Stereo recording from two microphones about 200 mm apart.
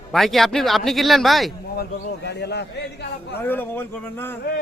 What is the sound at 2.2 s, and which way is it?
Speech, 55° left (ahead or behind).